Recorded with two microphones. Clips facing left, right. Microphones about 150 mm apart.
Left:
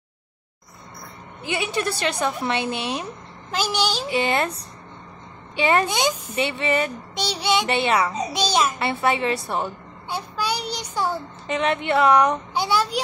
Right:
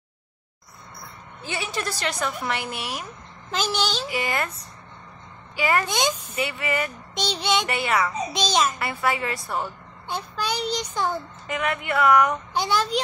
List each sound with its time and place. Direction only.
1.4 s a woman's voice: 15° left (ahead or behind)
2.4 s a woman's voice: 25° left (ahead or behind)
3.5 s speech: 10° left (ahead or behind)
4.1 s a woman's voice: 25° left (ahead or behind)
5.6 s a woman's voice: 25° left (ahead or behind)
5.9 s speech: 10° left (ahead or behind)
6.3 s a woman's voice: 30° left (ahead or behind)
7.2 s speech: 10° left (ahead or behind)
7.6 s a woman's voice: 25° left (ahead or behind)
8.3 s speech: 10° left (ahead or behind)
8.7 s a woman's voice: 25° left (ahead or behind)
10.0 s child singing: 10° left (ahead or behind)
11.4 s a woman's voice: 25° left (ahead or behind)
12.5 s speech: 10° left (ahead or behind)